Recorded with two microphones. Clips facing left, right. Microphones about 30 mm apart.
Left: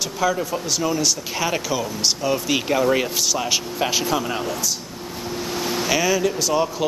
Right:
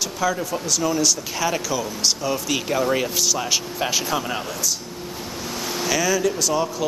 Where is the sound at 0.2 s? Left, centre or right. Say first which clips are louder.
Left 2 dB; centre.